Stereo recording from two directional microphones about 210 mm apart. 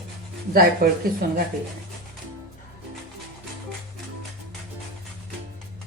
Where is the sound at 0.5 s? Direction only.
45° right (ahead or behind).